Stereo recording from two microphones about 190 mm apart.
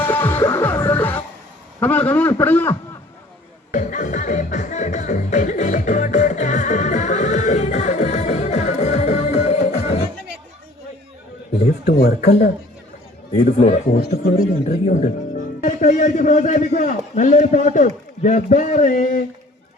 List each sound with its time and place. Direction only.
0.0 s music: 10° left (ahead or behind)
1.8 s a man's voice: 10° left (ahead or behind)
3.7 s music: 40° left (ahead or behind)
11.9 s speech: 55° left (ahead or behind)
13.3 s a man's voice: 35° left (ahead or behind)